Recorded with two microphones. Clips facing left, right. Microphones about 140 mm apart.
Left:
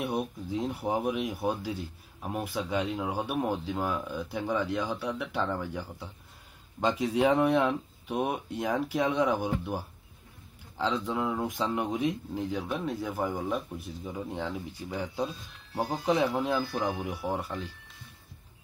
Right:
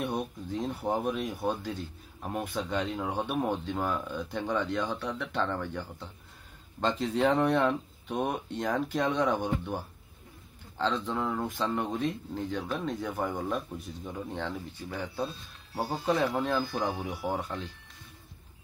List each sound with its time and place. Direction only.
0.0 s speech: 10° left (ahead or behind)
15.7 s speech: 5° right (ahead or behind)
16.1 s speech: 5° left (ahead or behind)